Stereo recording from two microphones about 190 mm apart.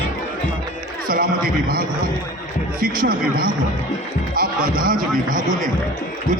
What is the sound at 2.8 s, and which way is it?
A man's voice, 50° right (ahead or behind).